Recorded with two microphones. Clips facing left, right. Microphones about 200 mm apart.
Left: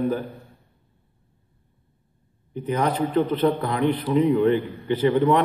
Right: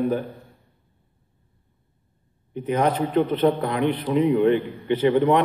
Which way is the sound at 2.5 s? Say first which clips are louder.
Right 2 dB; 35° left (ahead or behind).